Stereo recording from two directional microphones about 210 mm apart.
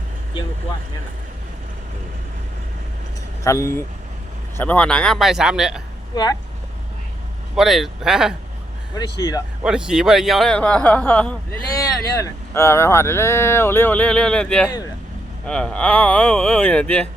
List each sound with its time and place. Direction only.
3.4 s speech: 15° left (ahead or behind); by 5.8 s centre (ahead or behind)
7.5 s speech: centre (ahead or behind)
9.1 s speech: 20° left (ahead or behind)
9.6 s speech: 5° right (ahead or behind)